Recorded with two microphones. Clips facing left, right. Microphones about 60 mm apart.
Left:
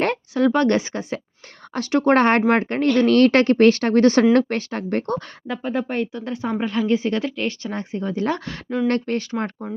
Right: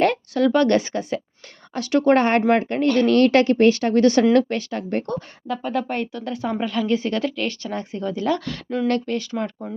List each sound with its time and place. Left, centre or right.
0.0 s speech: left
2.1 s speech: left
5.5 s speech: centre
6.1 s speech: left